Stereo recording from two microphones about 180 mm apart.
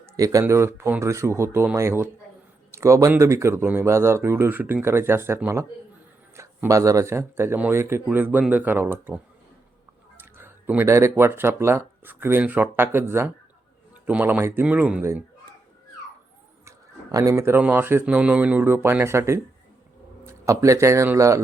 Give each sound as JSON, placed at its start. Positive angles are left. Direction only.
{"t": 0.2, "sound": "speech", "side_deg": -20}
{"t": 16.6, "sound": "a man's voice", "side_deg": -20}